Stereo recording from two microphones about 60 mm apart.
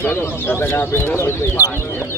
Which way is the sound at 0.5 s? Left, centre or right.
Left.